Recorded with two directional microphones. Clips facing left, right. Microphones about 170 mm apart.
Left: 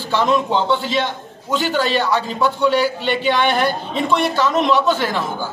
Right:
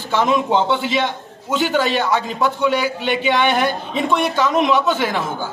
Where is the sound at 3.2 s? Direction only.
20° right (ahead or behind).